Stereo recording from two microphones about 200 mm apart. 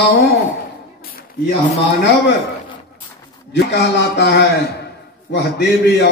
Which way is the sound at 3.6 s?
60° left (ahead or behind).